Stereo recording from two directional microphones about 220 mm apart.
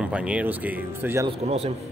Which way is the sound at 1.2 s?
30° right (ahead or behind).